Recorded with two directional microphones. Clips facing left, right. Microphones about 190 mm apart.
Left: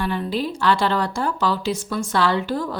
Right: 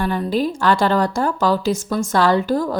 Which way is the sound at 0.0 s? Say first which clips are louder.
Right 4 dB; 45° right (ahead or behind).